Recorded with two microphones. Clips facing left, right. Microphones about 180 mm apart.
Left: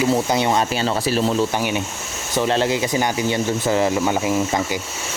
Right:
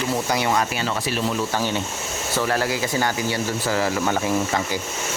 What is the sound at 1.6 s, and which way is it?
Speech, 15° left (ahead or behind).